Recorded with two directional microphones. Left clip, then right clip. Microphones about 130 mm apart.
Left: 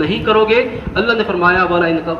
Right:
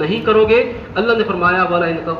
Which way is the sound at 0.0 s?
30° left (ahead or behind).